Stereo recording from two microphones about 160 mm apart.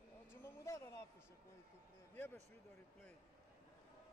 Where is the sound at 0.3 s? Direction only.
20° left (ahead or behind).